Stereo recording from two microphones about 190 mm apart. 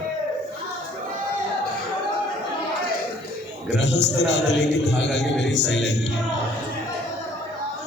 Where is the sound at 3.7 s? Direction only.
70° left (ahead or behind).